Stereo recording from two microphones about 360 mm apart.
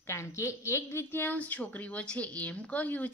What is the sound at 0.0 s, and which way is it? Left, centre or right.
A woman's voice, centre.